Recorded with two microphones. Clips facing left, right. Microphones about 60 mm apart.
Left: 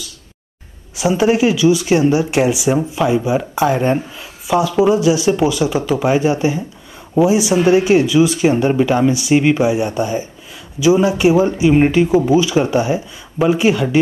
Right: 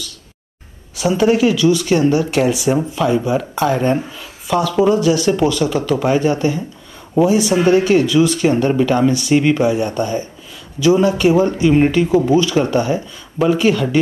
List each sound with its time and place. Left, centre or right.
0.9 s speech: centre